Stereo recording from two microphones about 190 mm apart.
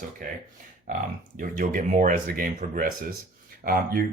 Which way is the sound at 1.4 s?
45° right (ahead or behind).